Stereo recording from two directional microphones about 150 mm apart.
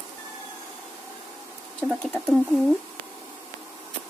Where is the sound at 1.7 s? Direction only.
10° left (ahead or behind).